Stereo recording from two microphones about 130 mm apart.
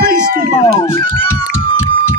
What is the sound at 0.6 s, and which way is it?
Speech, 20° left (ahead or behind).